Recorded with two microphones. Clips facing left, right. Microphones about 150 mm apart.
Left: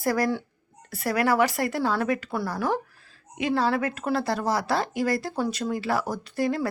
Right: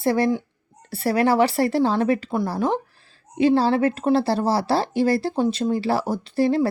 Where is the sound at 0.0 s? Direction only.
25° right (ahead or behind).